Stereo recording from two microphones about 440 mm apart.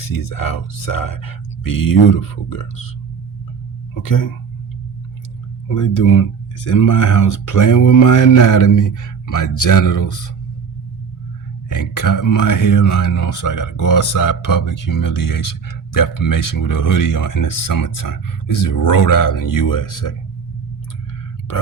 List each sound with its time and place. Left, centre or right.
0.0 s speech: left
4.0 s speech: left
5.6 s speech: left
11.7 s speech: left